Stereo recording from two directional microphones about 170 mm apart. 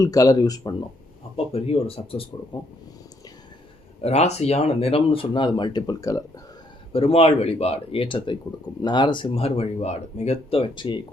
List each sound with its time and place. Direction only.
0.0 s speech: 20° left (ahead or behind)
1.5 s speech: 35° left (ahead or behind)
4.0 s speech: 40° left (ahead or behind); by 6.4 s 20° left (ahead or behind)
6.9 s speech: 35° left (ahead or behind)